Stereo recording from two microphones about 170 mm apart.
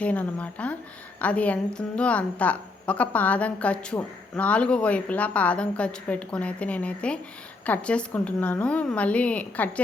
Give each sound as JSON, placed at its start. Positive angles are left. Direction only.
{"t": 0.0, "sound": "a woman's voice", "side_deg": 10}